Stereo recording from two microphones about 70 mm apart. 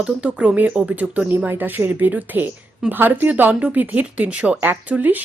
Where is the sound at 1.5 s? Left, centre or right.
Right.